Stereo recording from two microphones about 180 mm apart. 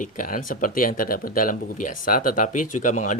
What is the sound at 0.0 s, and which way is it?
Speech, 50° left (ahead or behind).